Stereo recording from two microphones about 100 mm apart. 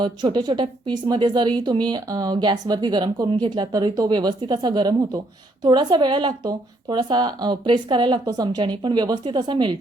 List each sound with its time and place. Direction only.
0.0 s speech: 50° right (ahead or behind)
8.2 s speech: 40° right (ahead or behind)